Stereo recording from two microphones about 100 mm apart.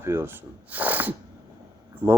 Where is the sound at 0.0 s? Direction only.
25° right (ahead or behind).